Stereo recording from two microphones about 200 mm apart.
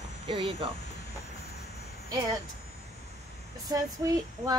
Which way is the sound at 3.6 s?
20° right (ahead or behind).